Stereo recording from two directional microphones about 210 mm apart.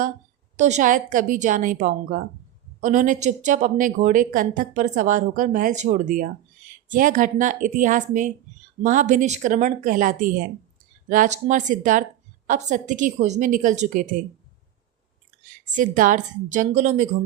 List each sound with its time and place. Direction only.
0.5 s a woman's voice: 35° right (ahead or behind)
15.7 s a woman's voice: 40° right (ahead or behind)